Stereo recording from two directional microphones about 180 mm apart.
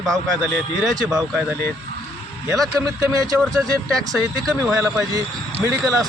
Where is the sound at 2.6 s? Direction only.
20° right (ahead or behind).